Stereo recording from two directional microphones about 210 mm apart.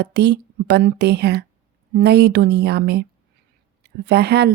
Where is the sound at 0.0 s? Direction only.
50° right (ahead or behind).